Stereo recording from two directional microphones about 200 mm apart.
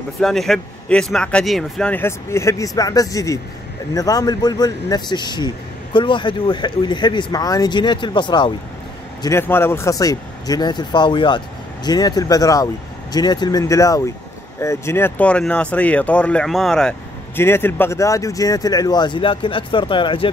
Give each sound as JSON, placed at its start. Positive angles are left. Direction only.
{"t": 0.2, "sound": "speech", "side_deg": 0}
{"t": 9.2, "sound": "speech", "side_deg": 10}